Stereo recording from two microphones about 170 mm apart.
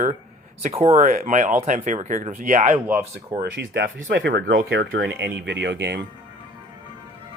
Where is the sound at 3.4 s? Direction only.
70° right (ahead or behind); by 6.0 s 85° right.